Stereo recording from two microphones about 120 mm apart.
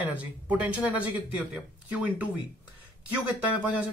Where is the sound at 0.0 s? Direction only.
10° right (ahead or behind).